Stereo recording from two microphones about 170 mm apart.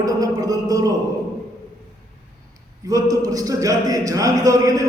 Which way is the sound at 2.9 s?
20° right (ahead or behind).